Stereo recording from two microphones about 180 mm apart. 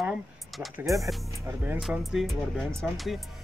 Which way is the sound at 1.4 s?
10° right (ahead or behind).